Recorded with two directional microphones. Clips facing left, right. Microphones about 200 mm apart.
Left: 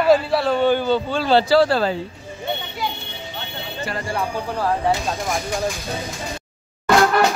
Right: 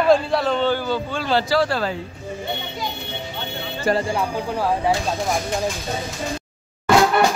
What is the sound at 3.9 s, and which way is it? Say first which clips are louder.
Speech: right 10 dB; 45° right (ahead or behind).